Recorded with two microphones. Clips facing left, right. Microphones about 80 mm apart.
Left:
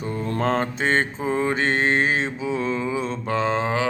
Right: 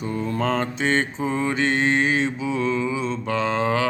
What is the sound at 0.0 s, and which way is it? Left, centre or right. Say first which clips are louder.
Mantra: even; left.